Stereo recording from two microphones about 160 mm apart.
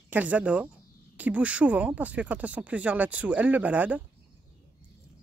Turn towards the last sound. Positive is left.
turn(degrees=-10)  # may be behind; listen again after turning